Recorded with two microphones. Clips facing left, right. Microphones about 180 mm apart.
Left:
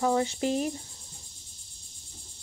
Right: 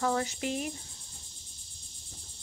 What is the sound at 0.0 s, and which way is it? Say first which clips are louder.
Speech: left 4 dB; 20° left (ahead or behind).